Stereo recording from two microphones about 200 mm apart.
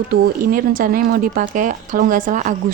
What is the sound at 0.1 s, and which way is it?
A woman's voice, 45° right (ahead or behind).